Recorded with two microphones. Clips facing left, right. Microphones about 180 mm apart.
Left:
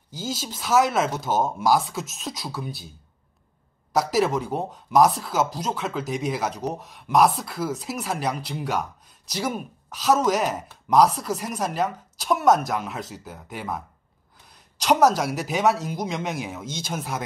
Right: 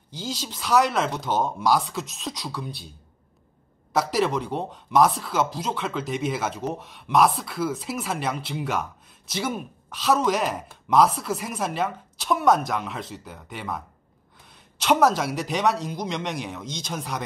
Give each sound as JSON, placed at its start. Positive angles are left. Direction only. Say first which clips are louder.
{"t": 0.1, "sound": "speech", "louder": "left 1 dB", "side_deg": 0}
{"t": 3.9, "sound": "speech", "louder": "left 1 dB", "side_deg": 0}